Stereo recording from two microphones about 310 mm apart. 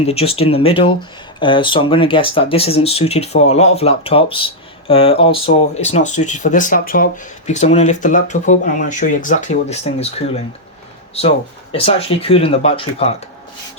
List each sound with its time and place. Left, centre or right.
0.0 s speech: centre